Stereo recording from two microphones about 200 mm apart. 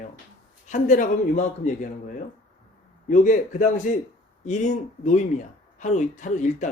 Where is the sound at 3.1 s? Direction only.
40° left (ahead or behind).